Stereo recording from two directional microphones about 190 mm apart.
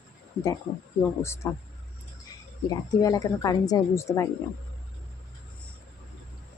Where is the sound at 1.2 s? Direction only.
15° left (ahead or behind).